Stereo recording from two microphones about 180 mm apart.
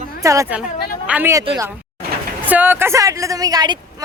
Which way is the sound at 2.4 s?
10° right (ahead or behind).